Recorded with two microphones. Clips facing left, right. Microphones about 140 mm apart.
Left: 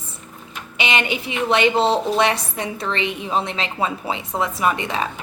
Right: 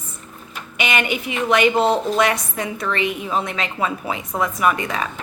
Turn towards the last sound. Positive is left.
turn(degrees=30)  # may be behind; listen again after turning